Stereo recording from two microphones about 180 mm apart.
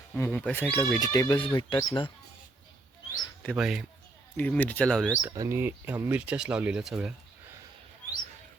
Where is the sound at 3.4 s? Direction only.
5° right (ahead or behind).